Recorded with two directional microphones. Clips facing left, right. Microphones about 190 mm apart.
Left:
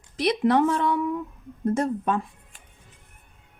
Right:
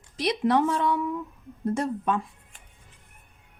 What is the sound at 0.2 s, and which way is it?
Speech, 55° left (ahead or behind).